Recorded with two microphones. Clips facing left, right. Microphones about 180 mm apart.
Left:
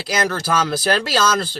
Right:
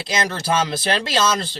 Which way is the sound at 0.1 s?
25° right (ahead or behind).